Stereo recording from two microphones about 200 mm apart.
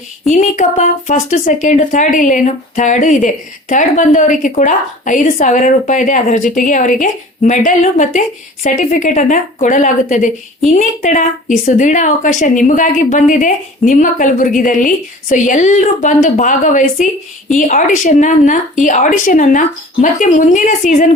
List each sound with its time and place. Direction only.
0.3 s speech: 40° left (ahead or behind)